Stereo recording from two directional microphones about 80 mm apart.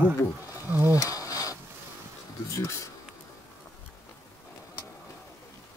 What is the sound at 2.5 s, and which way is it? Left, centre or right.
Speech, left.